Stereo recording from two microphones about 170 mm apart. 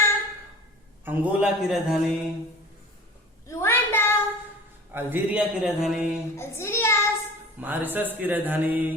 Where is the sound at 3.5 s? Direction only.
15° left (ahead or behind).